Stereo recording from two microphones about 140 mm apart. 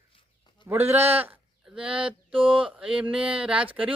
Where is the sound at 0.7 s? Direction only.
15° right (ahead or behind).